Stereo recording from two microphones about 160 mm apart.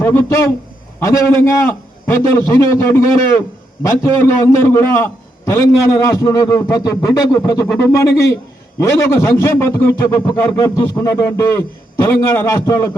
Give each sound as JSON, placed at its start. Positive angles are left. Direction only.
{"t": 0.0, "sound": "a man's voice", "side_deg": 15}